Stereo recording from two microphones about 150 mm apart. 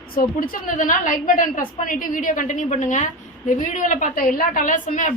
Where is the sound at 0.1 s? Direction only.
70° left (ahead or behind).